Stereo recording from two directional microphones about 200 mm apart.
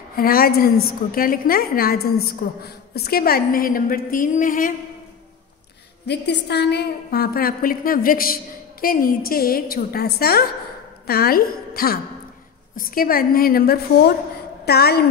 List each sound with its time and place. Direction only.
0.1 s a woman's voice: 45° left (ahead or behind)
6.0 s a woman's voice: 55° left (ahead or behind)